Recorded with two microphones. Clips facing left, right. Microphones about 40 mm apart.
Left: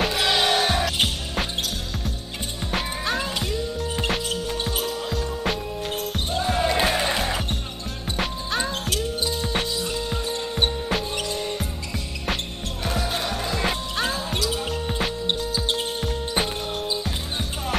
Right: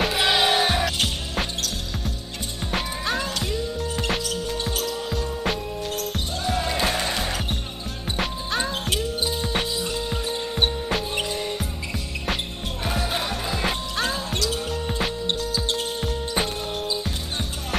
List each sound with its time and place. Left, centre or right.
0.0 s music: centre
2.7 s music: centre
4.9 s music: centre
5.9 s music: centre
8.2 s music: centre
11.1 s music: centre
12.8 s music: centre
16.0 s music: centre